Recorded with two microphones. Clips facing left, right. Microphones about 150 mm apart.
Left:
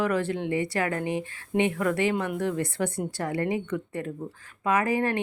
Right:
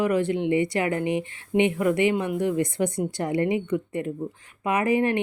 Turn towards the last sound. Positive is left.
turn(degrees=-15)  # may be behind; listen again after turning